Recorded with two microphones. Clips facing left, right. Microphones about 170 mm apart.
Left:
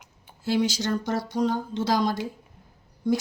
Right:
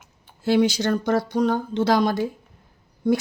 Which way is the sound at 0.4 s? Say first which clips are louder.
Right 5 dB; 60° right (ahead or behind).